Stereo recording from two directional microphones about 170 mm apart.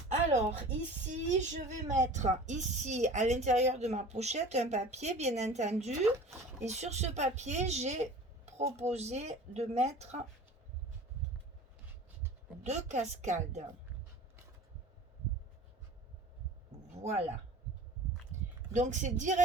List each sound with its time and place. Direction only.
0.1 s speech: 45° right (ahead or behind)
12.6 s a woman's voice: 40° right (ahead or behind)
18.7 s a woman's voice: 45° right (ahead or behind)